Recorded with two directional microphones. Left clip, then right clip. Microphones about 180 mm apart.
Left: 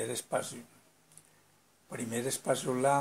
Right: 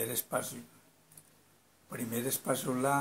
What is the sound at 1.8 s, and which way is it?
Speech, 30° left (ahead or behind).